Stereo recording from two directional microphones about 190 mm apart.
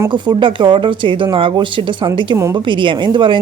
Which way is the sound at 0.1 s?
25° right (ahead or behind).